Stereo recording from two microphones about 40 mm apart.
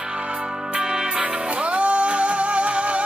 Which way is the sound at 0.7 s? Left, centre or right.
Right.